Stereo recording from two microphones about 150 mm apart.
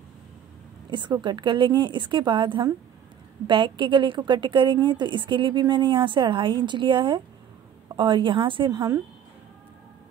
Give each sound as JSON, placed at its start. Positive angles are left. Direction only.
{"t": 0.8, "sound": "a woman's voice", "side_deg": -30}